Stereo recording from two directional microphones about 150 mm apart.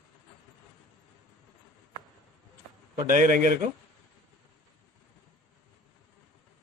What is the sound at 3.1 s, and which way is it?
Speech, 65° right (ahead or behind).